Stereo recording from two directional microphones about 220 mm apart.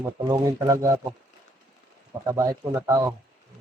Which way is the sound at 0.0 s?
15° right (ahead or behind).